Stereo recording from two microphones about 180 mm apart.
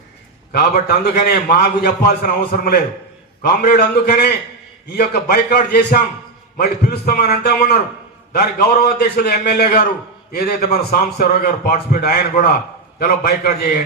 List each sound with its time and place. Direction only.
0.5 s a man's voice: 60° left (ahead or behind)